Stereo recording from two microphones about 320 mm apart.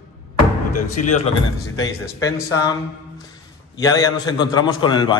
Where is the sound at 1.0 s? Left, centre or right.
Left.